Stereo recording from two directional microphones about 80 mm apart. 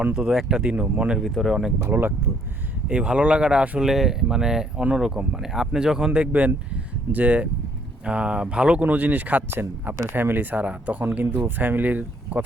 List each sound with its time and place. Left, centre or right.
0.0 s speech: centre
1.8 s speech: right
2.8 s speech: centre
3.8 s speech: centre
6.1 s speech: right